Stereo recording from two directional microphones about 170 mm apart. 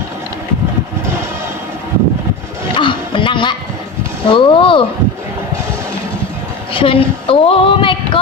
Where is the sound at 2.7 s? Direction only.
30° left (ahead or behind).